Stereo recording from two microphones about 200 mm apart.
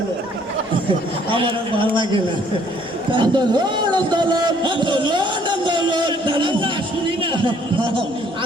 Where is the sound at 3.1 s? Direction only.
20° right (ahead or behind).